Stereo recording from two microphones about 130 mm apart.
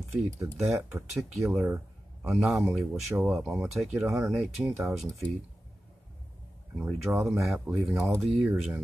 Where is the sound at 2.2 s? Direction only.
5° right (ahead or behind).